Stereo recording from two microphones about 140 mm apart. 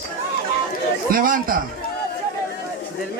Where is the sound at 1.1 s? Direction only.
80° right.